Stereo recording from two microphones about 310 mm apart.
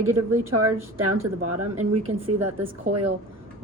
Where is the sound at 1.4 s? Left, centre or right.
Right.